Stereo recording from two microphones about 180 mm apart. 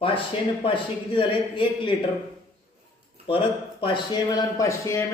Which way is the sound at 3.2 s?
30° left (ahead or behind).